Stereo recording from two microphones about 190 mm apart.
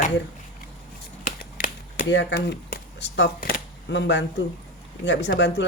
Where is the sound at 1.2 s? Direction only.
45° left (ahead or behind).